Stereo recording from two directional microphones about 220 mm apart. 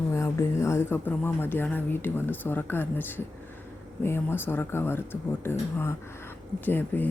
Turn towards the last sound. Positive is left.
turn(degrees=10)  # may be behind; listen again after turning